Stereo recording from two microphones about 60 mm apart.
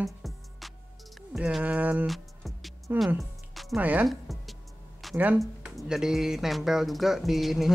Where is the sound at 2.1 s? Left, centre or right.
Centre.